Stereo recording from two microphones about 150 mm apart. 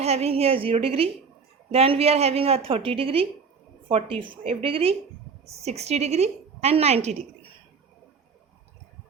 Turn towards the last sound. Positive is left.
turn(degrees=-45)  # may be behind; listen again after turning